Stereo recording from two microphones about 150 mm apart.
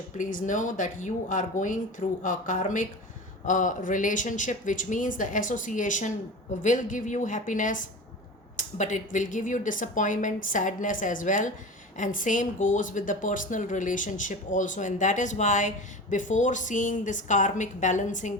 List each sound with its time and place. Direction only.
0.2 s speech: 60° left (ahead or behind)